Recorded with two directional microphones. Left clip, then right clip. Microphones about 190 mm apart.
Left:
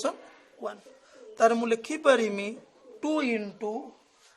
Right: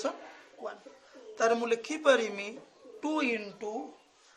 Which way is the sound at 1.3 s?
45° left (ahead or behind).